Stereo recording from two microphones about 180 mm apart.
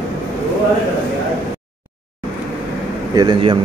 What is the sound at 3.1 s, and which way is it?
Speech, 25° right (ahead or behind).